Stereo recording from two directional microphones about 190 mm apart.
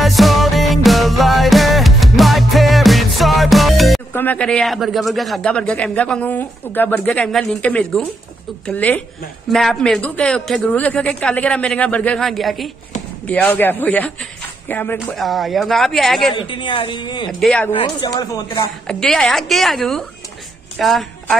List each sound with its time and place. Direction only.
0.0 s music: centre (ahead or behind)
4.1 s a man's voice: 10° left (ahead or behind)
16.3 s a woman's voice: 25° left (ahead or behind)
17.3 s a man's voice: 5° left (ahead or behind)
17.7 s a woman's voice: 20° left (ahead or behind)
18.9 s a man's voice: 5° left (ahead or behind)